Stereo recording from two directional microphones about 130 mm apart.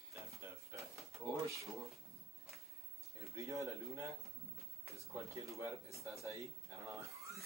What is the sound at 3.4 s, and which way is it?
Speech, 25° right (ahead or behind).